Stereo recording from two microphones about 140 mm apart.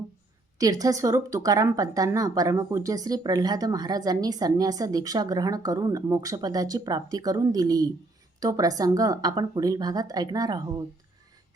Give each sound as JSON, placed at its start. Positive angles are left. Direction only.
{"t": 0.6, "sound": "speech", "side_deg": -25}